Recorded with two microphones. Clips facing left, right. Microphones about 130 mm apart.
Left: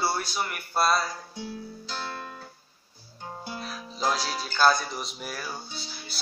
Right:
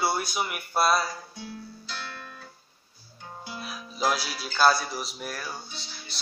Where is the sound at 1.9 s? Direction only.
35° left (ahead or behind).